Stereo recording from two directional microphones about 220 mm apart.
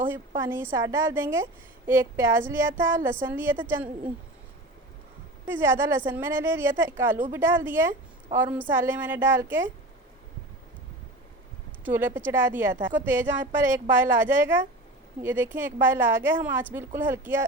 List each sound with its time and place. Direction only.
0.1 s a woman's voice: 10° right (ahead or behind)
5.5 s a woman's voice: 10° right (ahead or behind)
11.9 s a woman's voice: 10° right (ahead or behind)